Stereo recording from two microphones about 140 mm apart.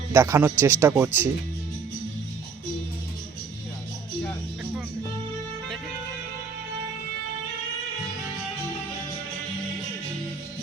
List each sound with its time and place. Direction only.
0.1 s a man's voice: 20° right (ahead or behind)